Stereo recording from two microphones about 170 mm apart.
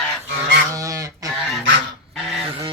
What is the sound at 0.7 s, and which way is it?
Goose, 20° right (ahead or behind).